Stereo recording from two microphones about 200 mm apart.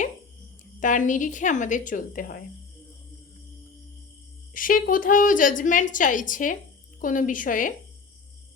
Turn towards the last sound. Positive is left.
turn(degrees=40)  # may be behind; listen again after turning